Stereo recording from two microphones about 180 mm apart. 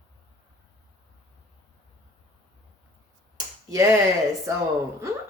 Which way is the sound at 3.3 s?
20° right (ahead or behind).